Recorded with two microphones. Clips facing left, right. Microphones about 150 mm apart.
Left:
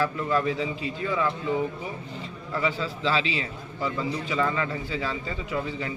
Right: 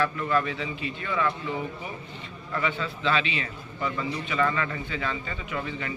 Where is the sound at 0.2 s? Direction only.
25° left (ahead or behind).